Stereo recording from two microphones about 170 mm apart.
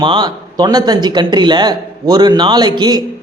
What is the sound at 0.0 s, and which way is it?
A man's voice, 25° right (ahead or behind).